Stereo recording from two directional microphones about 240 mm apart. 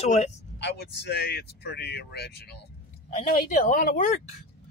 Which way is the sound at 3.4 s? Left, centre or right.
Left.